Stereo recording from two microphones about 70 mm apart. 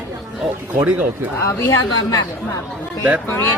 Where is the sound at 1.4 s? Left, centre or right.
Left.